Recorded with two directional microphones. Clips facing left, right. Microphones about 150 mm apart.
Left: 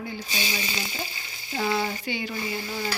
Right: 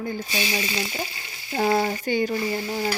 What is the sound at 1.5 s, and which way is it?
Speech, 45° right (ahead or behind).